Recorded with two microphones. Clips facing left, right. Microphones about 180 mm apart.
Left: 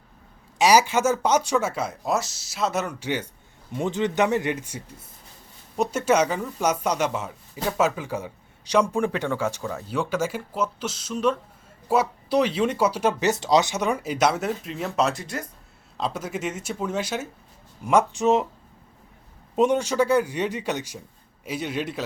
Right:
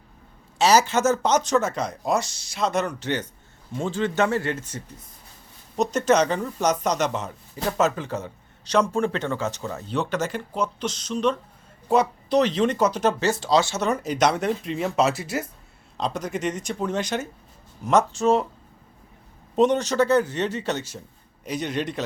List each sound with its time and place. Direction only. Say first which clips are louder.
0.6 s speech: even; 10° left (ahead or behind)
9.6 s speech: left 1 dB; 5° right (ahead or behind)
9.9 s speech: even; 10° left (ahead or behind)
16.0 s speech: right 1 dB; 5° left (ahead or behind)
19.5 s speech: right 1 dB; 10° left (ahead or behind)